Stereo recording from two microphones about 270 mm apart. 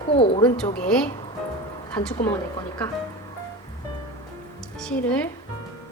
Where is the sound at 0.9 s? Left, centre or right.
Centre.